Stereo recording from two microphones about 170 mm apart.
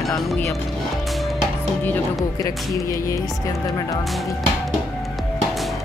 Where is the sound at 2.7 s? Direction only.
20° left (ahead or behind).